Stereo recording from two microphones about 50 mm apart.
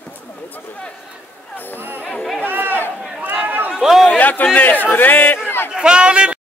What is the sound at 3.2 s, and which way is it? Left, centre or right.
Speech, right.